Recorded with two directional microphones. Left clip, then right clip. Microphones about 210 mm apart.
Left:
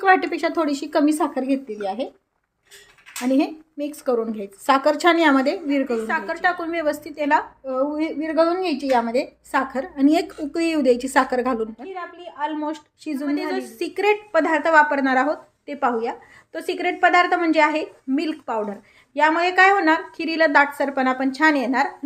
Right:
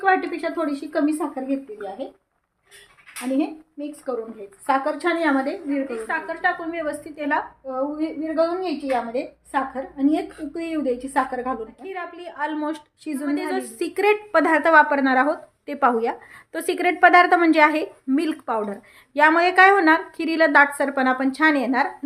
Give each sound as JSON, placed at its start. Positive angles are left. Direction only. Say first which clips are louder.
{"t": 0.0, "sound": "a woman's voice", "louder": "left 3 dB", "side_deg": 35}
{"t": 3.3, "sound": "a woman's voice", "louder": "left 2 dB", "side_deg": 35}
{"t": 5.9, "sound": "a woman's voice", "louder": "left 3 dB", "side_deg": 15}
{"t": 7.7, "sound": "a woman's voice", "louder": "left 3 dB", "side_deg": 35}
{"t": 11.9, "sound": "a woman's voice", "louder": "right 1 dB", "side_deg": -5}